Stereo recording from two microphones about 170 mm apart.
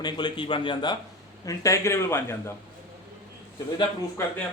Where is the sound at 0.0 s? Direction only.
25° left (ahead or behind).